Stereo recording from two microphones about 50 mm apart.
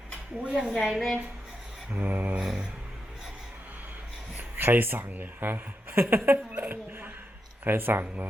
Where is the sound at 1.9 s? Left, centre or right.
Right.